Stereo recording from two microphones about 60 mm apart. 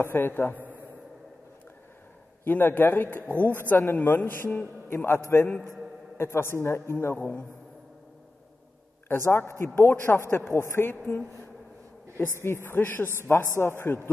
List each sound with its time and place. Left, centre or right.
0.0 s a man's voice: left
2.4 s a man's voice: left
9.1 s a man's voice: left
12.4 s a man's voice: left